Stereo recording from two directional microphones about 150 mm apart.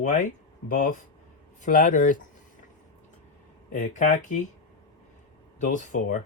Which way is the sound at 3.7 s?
55° left (ahead or behind).